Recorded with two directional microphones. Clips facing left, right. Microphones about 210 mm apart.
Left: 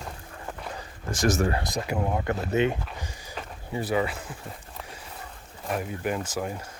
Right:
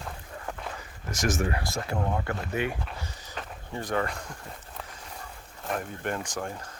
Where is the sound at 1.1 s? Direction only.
35° left (ahead or behind).